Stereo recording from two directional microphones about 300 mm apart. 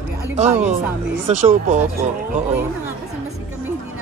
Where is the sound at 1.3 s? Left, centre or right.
Right.